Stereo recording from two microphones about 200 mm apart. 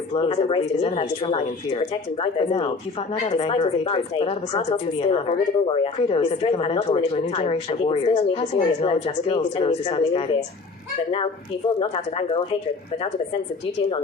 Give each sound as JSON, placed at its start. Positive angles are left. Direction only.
{"t": 0.1, "sound": "speech", "side_deg": 30}
{"t": 11.8, "sound": "speech", "side_deg": 30}